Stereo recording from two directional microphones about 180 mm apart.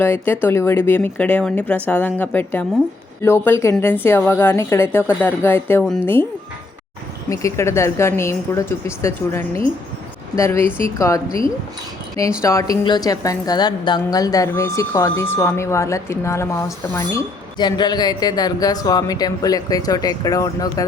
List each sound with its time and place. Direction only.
0.0 s speech: 10° left (ahead or behind)
7.3 s speech: 15° left (ahead or behind)
12.4 s a woman's voice: 15° left (ahead or behind)